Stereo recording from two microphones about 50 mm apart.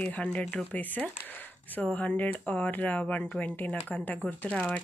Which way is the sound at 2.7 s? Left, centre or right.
Left.